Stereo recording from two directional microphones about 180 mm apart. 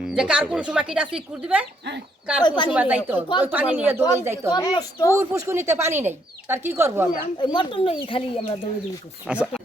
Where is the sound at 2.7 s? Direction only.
5° right (ahead or behind).